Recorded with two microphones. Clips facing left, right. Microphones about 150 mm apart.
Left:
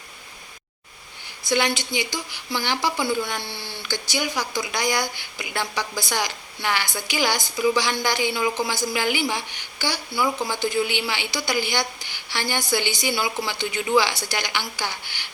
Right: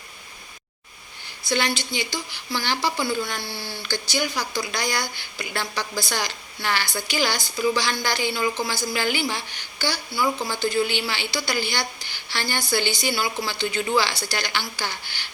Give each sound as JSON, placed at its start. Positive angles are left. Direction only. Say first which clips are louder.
{"t": 1.5, "sound": "speech", "louder": "left 2 dB", "side_deg": 15}